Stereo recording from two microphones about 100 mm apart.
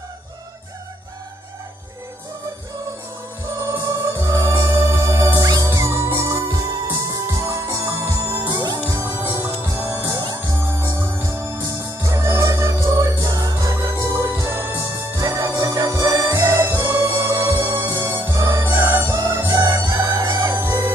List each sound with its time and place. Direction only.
3.8 s music: 30° right (ahead or behind)
8.9 s music: 25° right (ahead or behind)
20.5 s music: 25° right (ahead or behind)